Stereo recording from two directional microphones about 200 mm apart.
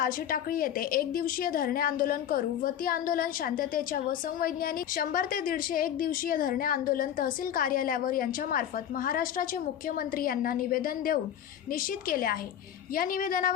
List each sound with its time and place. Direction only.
0.0 s a woman's voice: 45° left (ahead or behind)